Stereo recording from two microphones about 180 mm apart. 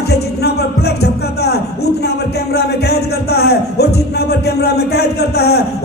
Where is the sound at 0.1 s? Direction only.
65° left (ahead or behind).